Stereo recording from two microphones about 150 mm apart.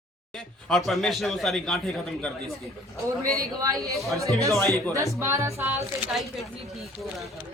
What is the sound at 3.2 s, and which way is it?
Speech, 80° right.